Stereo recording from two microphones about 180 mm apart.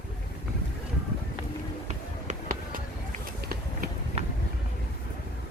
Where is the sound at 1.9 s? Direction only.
45° right (ahead or behind).